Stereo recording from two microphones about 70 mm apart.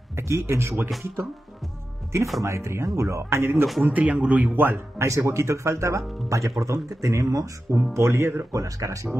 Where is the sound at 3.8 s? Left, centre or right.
Right.